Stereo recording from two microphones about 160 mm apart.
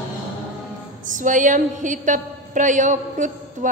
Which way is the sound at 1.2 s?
55° right (ahead or behind).